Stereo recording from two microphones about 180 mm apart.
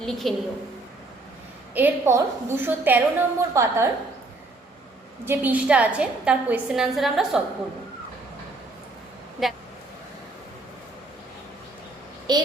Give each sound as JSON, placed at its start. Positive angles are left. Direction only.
{"t": 0.0, "sound": "a woman's voice", "side_deg": 0}
{"t": 1.7, "sound": "a woman's voice", "side_deg": -10}
{"t": 5.2, "sound": "a woman's voice", "side_deg": -10}
{"t": 12.3, "sound": "speech", "side_deg": -25}